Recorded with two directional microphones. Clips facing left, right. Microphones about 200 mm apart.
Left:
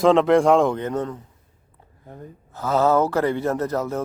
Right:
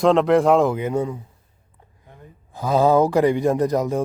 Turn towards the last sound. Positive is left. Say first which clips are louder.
# right 4 dB
turn(degrees=-15)  # may be behind; listen again after turning